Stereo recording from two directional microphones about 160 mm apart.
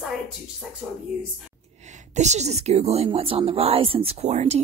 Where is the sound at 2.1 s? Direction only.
45° right (ahead or behind).